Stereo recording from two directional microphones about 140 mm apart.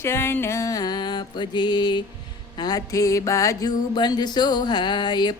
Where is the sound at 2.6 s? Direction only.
25° left (ahead or behind).